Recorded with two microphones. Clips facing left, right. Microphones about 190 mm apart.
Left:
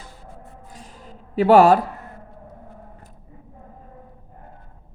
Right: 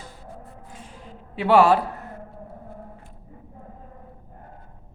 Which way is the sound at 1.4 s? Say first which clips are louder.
Left 4 dB; 45° left (ahead or behind).